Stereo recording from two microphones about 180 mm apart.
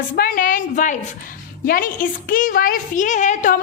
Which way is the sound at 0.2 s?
50° left (ahead or behind).